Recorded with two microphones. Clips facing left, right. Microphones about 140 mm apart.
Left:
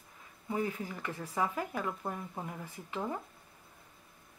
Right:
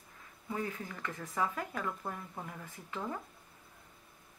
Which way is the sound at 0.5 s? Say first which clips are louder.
Left 4 dB; 20° left (ahead or behind).